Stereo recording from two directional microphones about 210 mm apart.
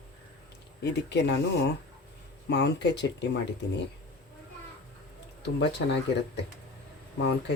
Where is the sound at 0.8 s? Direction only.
55° left (ahead or behind).